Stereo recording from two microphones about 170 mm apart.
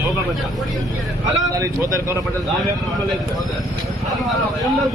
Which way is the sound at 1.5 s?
20° right (ahead or behind).